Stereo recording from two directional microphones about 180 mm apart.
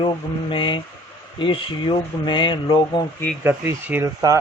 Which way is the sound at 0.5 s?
25° left (ahead or behind).